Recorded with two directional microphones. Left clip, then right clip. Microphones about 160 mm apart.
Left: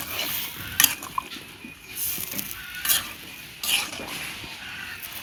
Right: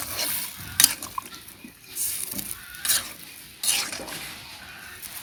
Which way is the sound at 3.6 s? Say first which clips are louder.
Left 2 dB; 20° right (ahead or behind).